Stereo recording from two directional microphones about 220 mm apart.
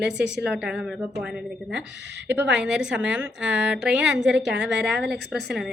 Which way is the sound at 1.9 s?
50° right (ahead or behind).